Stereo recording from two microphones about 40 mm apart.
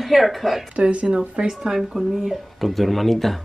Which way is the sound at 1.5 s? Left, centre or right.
Centre.